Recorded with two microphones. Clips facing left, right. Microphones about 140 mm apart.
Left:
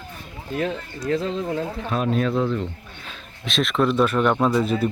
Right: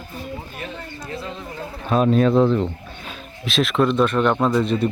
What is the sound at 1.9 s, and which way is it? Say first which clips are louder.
Speech: right 7 dB; 30° right (ahead or behind).